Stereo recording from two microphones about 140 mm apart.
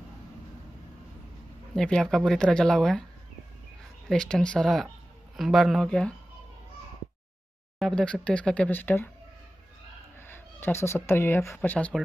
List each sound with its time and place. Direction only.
1.8 s speech: 5° left (ahead or behind)
4.1 s speech: 5° left (ahead or behind)
7.8 s speech: 5° left (ahead or behind)
10.2 s speech: 15° left (ahead or behind)